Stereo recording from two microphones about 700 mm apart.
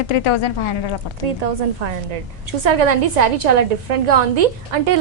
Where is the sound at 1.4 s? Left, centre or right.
Right.